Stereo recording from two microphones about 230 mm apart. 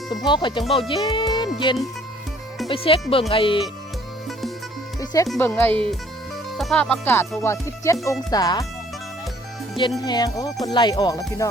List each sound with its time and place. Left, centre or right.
0.3 s speech: left
4.9 s music: centre
5.3 s speech: centre
10.0 s speech: centre